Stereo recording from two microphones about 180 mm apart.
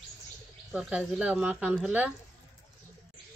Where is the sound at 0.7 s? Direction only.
5° right (ahead or behind).